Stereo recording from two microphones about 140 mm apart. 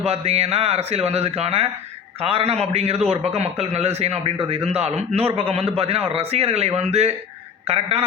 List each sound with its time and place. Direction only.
0.0 s a man's voice: 50° right (ahead or behind)